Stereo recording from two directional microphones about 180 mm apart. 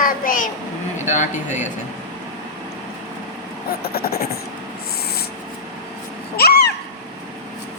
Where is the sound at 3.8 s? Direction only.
60° left (ahead or behind).